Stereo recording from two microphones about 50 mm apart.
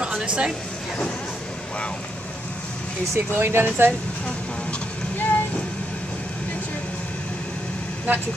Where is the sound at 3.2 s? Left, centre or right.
Right.